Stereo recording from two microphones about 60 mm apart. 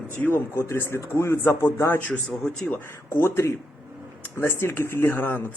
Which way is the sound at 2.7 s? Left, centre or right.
Left.